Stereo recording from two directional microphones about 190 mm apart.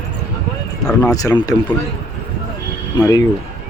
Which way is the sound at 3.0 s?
20° left (ahead or behind).